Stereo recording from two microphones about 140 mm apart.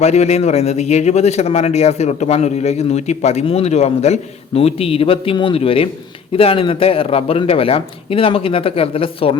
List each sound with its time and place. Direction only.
0.0 s a man's voice: 50° left (ahead or behind)